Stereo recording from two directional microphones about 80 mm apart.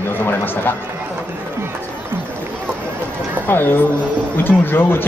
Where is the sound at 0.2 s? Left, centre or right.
Left.